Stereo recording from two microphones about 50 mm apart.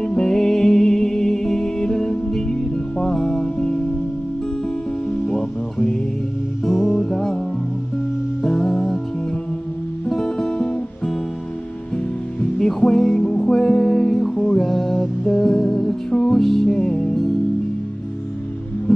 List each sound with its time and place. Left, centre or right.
0.0 s music: centre
5.1 s music: centre
8.4 s music: centre
10.0 s music: centre
12.4 s music: centre
18.9 s music: centre